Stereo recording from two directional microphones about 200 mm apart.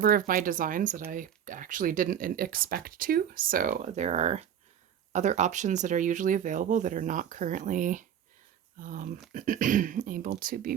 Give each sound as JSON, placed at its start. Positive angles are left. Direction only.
{"t": 0.0, "sound": "speech", "side_deg": -45}